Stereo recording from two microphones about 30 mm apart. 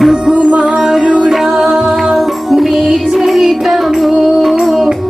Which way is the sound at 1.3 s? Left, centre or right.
Centre.